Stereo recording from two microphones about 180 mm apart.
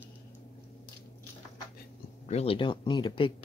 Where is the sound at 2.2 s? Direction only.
35° left (ahead or behind).